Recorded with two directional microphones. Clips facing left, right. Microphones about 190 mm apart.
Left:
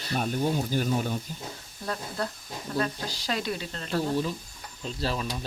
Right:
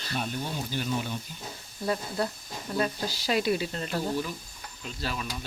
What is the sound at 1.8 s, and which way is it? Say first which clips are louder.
Speech: right 3 dB; 10° right (ahead or behind).